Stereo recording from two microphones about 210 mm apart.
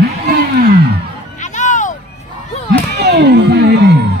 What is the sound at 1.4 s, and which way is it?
Music, 35° left (ahead or behind).